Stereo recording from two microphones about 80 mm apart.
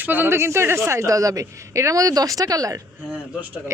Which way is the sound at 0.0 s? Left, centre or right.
Right.